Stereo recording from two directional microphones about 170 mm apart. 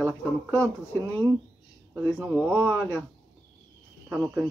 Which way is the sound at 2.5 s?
10° left (ahead or behind).